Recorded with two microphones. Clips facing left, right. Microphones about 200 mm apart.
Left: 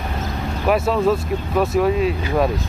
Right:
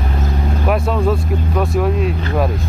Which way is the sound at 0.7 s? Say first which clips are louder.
Left 1 dB; centre (ahead or behind).